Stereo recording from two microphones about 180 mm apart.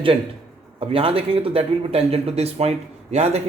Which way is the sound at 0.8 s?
30° right (ahead or behind).